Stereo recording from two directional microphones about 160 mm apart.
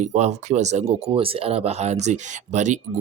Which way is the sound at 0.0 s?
45° right (ahead or behind).